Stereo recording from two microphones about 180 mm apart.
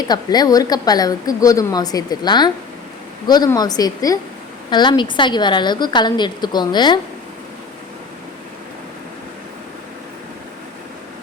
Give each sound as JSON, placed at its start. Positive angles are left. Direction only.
{"t": 0.1, "sound": "a woman's voice", "side_deg": 20}